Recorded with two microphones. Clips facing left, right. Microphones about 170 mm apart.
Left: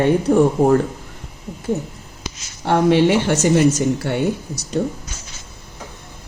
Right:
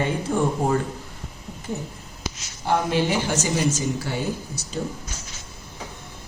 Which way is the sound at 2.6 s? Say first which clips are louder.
Left 8 dB; 70° left (ahead or behind).